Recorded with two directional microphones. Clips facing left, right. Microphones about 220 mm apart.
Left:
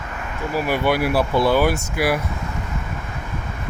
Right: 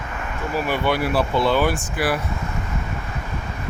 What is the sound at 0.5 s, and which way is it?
Speech, 10° left (ahead or behind).